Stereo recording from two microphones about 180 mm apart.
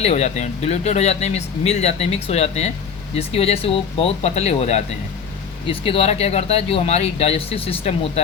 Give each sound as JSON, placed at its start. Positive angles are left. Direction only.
{"t": 0.0, "sound": "speech", "side_deg": 40}